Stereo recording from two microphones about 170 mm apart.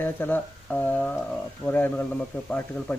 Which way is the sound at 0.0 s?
10° left (ahead or behind).